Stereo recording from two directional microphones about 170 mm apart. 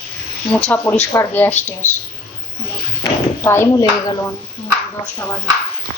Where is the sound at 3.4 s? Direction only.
15° left (ahead or behind).